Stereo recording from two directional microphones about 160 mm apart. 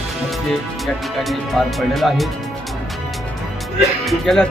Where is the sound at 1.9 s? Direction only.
Centre (ahead or behind).